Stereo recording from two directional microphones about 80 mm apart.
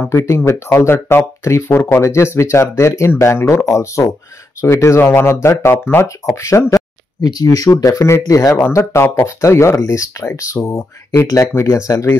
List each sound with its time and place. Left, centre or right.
0.1 s speech: left
5.9 s speech: left
6.3 s a sound: left
7.2 s speech: left
8.7 s speech: left